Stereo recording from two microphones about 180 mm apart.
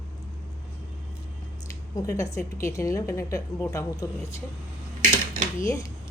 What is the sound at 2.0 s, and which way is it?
A woman's voice, 20° left (ahead or behind).